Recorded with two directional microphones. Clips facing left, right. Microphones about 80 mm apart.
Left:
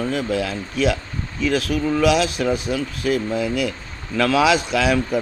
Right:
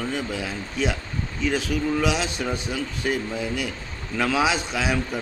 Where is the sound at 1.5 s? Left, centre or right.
Left.